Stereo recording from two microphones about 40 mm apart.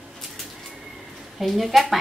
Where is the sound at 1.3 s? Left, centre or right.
Centre.